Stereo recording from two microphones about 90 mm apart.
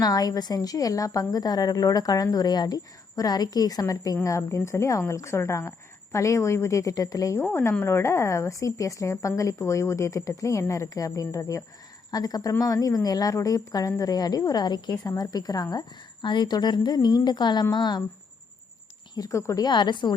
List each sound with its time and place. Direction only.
0.0 s a woman's voice: 45° left (ahead or behind)
7.4 s a woman's voice: 25° left (ahead or behind); by 15.8 s 45° left (ahead or behind)
16.2 s speech: 55° left (ahead or behind)
19.1 s a woman's voice: 40° left (ahead or behind)
19.6 s a woman's voice: 55° left (ahead or behind)